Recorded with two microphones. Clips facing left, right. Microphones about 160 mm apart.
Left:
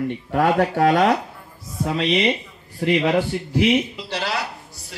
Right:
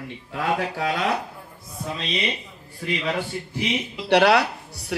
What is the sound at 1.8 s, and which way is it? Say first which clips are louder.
Mantra: left 8 dB; 75° left (ahead or behind).